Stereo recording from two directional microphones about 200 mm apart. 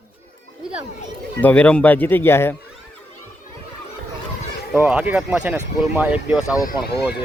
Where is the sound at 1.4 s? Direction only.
5° left (ahead or behind).